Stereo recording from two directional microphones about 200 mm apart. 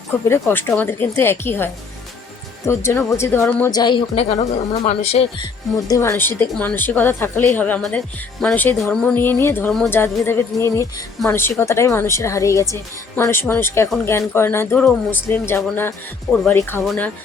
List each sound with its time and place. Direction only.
0.3 s a woman's voice: 10° left (ahead or behind); by 5.5 s 30° left (ahead or behind)
5.9 s a woman's voice: 10° left (ahead or behind)